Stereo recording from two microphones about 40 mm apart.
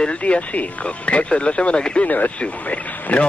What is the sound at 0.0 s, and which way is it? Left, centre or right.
Speech, left.